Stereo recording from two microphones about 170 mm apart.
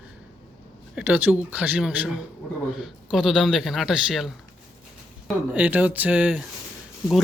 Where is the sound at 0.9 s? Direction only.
5° right (ahead or behind).